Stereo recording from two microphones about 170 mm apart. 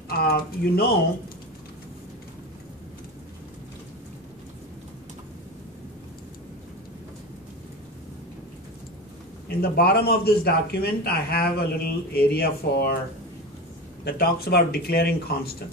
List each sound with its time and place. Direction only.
0.1 s speech: 65° left (ahead or behind)
9.5 s speech: 65° left (ahead or behind)
14.0 s speech: 65° left (ahead or behind)